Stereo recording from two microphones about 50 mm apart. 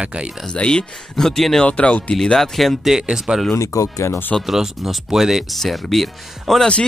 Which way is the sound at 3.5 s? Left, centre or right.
Left.